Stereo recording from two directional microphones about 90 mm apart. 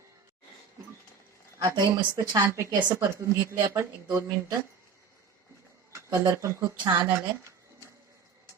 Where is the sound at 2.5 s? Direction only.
35° right (ahead or behind).